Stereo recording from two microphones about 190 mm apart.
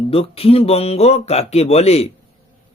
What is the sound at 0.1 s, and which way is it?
Speech, 30° left (ahead or behind).